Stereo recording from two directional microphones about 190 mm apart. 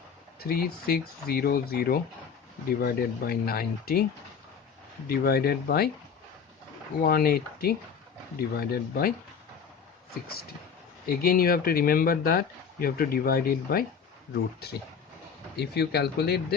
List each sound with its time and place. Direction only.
0.3 s speech: 50° left (ahead or behind)
5.0 s speech: 55° left (ahead or behind)
7.0 s speech: 50° left (ahead or behind)
11.1 s speech: 50° left (ahead or behind)